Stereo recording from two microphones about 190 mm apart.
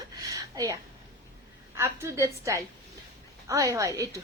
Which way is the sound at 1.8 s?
15° right (ahead or behind).